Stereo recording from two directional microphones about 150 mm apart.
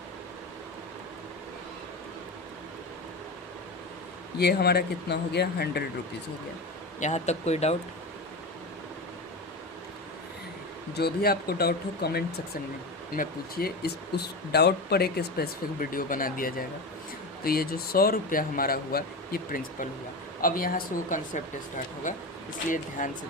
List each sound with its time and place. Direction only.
4.4 s speech: 90° left
7.0 s speech: 50° left (ahead or behind)
10.9 s speech: 90° left; by 16.6 s 70° left (ahead or behind)
17.4 s speech: 80° left; by 22.2 s 60° left (ahead or behind)